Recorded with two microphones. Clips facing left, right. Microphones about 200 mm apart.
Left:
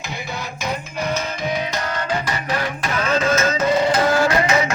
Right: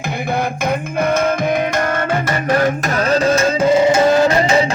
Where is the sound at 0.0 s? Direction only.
55° right (ahead or behind).